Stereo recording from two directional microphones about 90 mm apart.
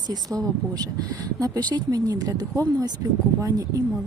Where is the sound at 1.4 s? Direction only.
50° right (ahead or behind).